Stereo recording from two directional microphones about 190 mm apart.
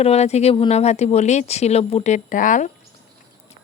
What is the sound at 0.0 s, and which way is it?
Speech, 35° left (ahead or behind).